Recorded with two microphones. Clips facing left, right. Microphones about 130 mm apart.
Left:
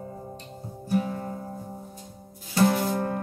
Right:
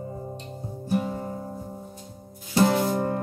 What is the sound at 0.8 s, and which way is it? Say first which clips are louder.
Music: even; 20° right (ahead or behind).